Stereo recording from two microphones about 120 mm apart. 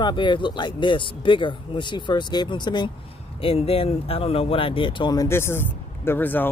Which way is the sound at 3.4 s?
55° left (ahead or behind).